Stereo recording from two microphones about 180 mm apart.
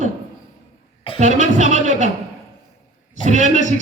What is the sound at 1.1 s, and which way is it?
Music, 40° right (ahead or behind).